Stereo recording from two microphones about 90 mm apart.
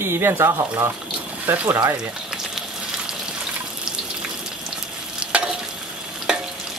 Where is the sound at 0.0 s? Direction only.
25° right (ahead or behind).